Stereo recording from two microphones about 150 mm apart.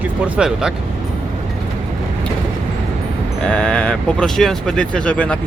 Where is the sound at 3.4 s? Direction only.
5° left (ahead or behind).